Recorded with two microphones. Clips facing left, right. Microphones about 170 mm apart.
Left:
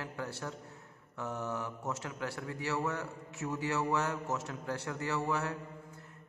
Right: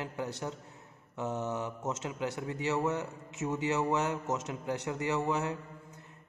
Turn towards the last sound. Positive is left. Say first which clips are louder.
# right 3 dB
turn(degrees=-20)  # may be behind; listen again after turning